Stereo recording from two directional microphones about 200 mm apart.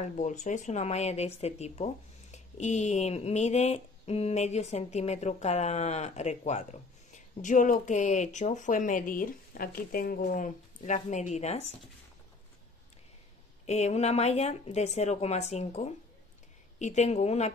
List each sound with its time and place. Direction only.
0.0 s speech: 35° left (ahead or behind)
13.7 s speech: 35° left (ahead or behind)